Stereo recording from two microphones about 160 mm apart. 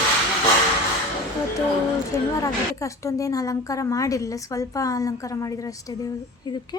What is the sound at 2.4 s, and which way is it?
A woman's voice, 20° left (ahead or behind).